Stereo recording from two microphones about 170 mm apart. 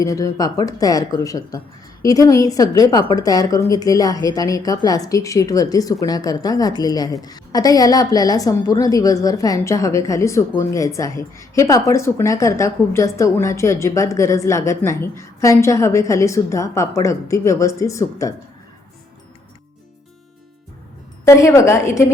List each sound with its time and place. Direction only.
0.0 s speech: 20° left (ahead or behind)
21.2 s speech: 15° left (ahead or behind)